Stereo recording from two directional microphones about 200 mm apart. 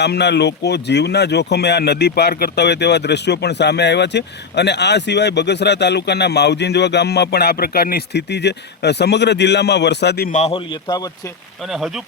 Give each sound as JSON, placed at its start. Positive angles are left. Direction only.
{"t": 0.0, "sound": "speech", "side_deg": 60}
{"t": 10.3, "sound": "a man's voice", "side_deg": 30}
{"t": 11.6, "sound": "speech", "side_deg": 0}